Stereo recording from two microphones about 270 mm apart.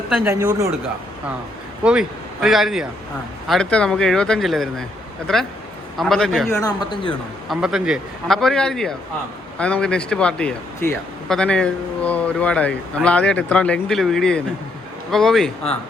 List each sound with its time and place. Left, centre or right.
0.3 s speech: centre
1.8 s speech: centre
6.6 s speech: centre
7.5 s speech: centre